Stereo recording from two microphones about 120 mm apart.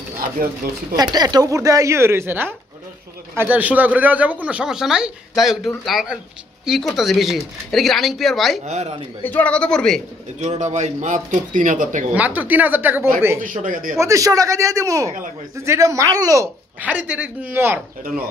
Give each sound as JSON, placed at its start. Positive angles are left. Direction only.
{"t": 0.9, "sound": "a man's voice", "side_deg": -35}
{"t": 8.6, "sound": "speech", "side_deg": -70}
{"t": 9.2, "sound": "a man's voice", "side_deg": 15}
{"t": 10.4, "sound": "a man's voice", "side_deg": -75}
{"t": 12.1, "sound": "speech", "side_deg": -10}
{"t": 13.4, "sound": "a man's voice", "side_deg": -90}
{"t": 13.9, "sound": "a man's voice", "side_deg": -25}
{"t": 16.8, "sound": "speech", "side_deg": -10}